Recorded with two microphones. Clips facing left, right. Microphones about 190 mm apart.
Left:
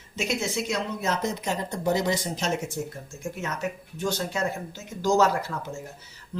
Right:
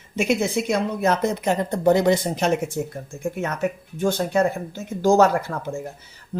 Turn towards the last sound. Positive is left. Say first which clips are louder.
# right 5 dB
turn(degrees=-45)  # may be behind; listen again after turning